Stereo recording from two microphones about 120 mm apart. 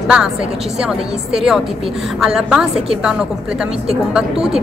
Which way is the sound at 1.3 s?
5° right (ahead or behind).